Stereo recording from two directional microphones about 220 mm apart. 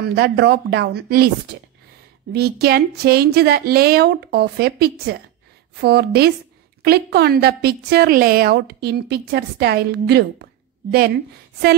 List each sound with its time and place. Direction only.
0.1 s a woman's voice: 50° right (ahead or behind)